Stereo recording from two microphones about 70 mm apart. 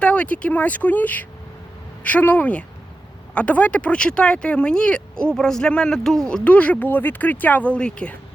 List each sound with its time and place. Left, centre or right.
0.0 s speech: centre
6.2 s speech: centre